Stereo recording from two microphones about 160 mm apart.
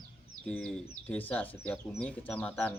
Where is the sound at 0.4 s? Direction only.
5° left (ahead or behind).